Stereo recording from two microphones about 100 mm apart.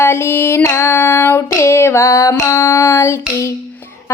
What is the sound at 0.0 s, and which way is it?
Female singing, 25° left (ahead or behind).